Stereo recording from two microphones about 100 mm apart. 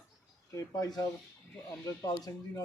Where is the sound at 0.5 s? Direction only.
35° left (ahead or behind).